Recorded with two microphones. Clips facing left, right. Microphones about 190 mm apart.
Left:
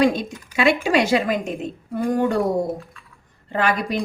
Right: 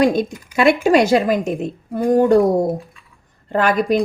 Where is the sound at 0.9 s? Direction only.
45° right (ahead or behind).